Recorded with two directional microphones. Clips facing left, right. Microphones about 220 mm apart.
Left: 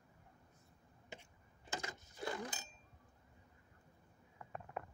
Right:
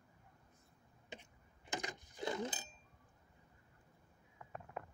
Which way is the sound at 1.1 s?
20° right (ahead or behind).